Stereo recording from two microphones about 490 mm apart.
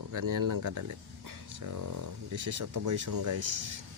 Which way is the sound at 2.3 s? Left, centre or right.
Right.